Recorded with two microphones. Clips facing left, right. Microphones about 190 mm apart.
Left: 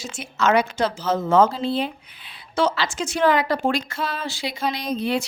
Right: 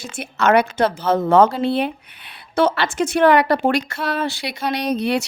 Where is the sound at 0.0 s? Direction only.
60° right (ahead or behind).